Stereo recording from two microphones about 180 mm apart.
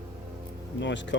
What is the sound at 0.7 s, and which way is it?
Speech, 85° left.